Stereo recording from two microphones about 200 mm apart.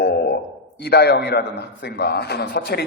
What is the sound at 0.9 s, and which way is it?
A man's voice, 55° left (ahead or behind).